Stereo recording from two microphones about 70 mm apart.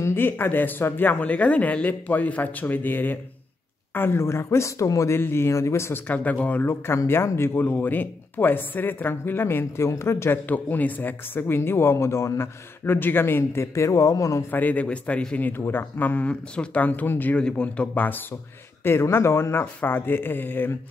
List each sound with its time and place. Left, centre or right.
0.0 s speech: left
5.1 s speech: left
6.0 s speech: left
7.2 s speech: left
10.5 s speech: left
14.5 s speech: left
17.4 s speech: centre